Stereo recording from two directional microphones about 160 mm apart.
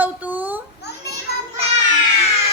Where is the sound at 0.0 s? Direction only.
10° right (ahead or behind).